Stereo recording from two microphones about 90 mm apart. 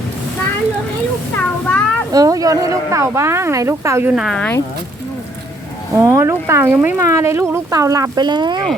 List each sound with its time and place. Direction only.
1.4 s a child's voice: 20° left (ahead or behind)
2.1 s speech: 40° right (ahead or behind)
5.9 s speech: 35° right (ahead or behind); by 8.6 s 55° right (ahead or behind)